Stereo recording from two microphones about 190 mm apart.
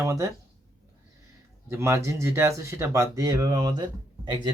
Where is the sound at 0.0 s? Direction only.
15° right (ahead or behind).